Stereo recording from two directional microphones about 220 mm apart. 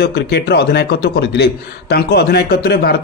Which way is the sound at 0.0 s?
50° left (ahead or behind).